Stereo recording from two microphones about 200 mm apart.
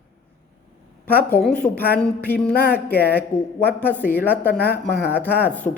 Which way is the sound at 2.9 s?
50° left (ahead or behind).